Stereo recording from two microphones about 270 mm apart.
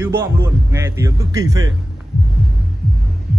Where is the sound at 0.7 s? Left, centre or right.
Centre.